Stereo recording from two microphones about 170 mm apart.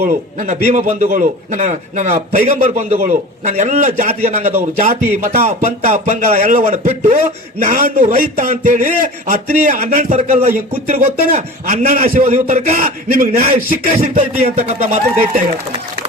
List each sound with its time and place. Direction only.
0.0 s a man's voice: 50° right (ahead or behind)